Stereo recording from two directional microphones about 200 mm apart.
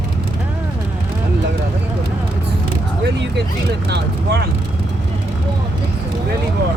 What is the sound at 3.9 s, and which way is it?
Vehicle, 55° right (ahead or behind).